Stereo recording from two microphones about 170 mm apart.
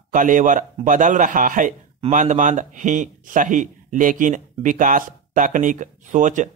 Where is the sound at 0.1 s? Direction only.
50° right (ahead or behind).